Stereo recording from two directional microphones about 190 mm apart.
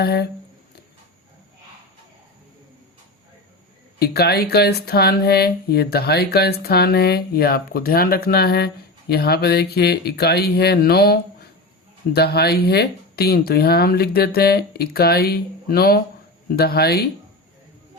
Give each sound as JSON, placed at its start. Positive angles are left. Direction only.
{"t": 0.0, "sound": "speech", "side_deg": 55}
{"t": 4.0, "sound": "speech", "side_deg": 55}